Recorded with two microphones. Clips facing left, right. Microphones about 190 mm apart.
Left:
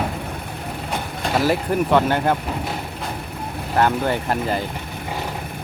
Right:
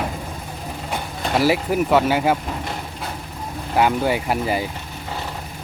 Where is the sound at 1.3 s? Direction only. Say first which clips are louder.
Right 1 dB; 5° right (ahead or behind).